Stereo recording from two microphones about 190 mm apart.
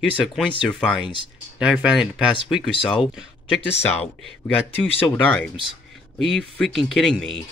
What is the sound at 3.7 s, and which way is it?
Speech, 30° left (ahead or behind).